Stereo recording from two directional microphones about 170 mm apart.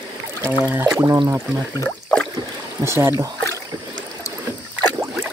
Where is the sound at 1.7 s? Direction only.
20° left (ahead or behind).